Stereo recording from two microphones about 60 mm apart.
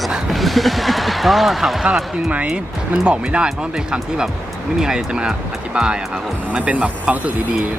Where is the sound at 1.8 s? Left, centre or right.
Centre.